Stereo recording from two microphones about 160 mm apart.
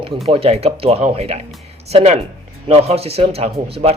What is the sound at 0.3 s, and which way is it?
Speech, 40° right (ahead or behind).